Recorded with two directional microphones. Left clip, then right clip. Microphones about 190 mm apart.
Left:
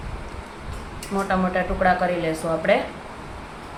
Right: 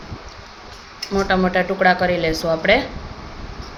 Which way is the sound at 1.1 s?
45° right (ahead or behind).